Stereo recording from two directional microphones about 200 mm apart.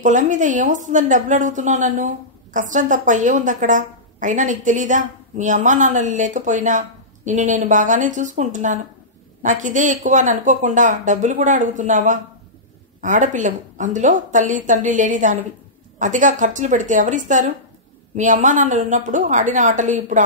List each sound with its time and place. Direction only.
0.0 s a woman's voice: 40° right (ahead or behind)